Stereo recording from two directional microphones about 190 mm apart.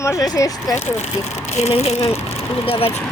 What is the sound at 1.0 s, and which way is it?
Speech, 35° left (ahead or behind).